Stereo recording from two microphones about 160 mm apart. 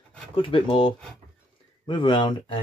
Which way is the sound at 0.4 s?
30° left (ahead or behind).